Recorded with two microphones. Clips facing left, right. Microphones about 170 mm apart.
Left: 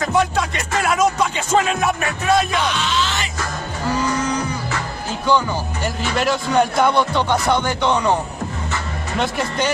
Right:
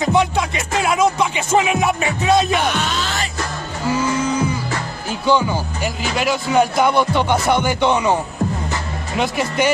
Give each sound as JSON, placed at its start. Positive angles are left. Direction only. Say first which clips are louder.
{"t": 0.0, "sound": "music", "louder": "right 2 dB", "side_deg": -10}
{"t": 2.6, "sound": "music", "louder": "even", "side_deg": -50}
{"t": 5.2, "sound": "speech", "louder": "right 2 dB", "side_deg": -10}
{"t": 9.2, "sound": "speech", "louder": "right 3 dB", "side_deg": -5}